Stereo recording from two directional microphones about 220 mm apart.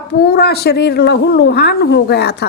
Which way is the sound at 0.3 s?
45° left (ahead or behind).